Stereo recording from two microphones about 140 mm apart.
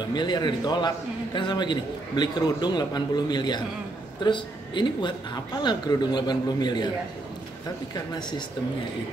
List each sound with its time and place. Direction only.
0.0 s a man's voice: 30° left (ahead or behind)